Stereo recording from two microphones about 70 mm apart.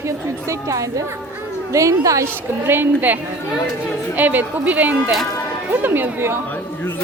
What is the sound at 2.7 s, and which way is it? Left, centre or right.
A woman's voice, right.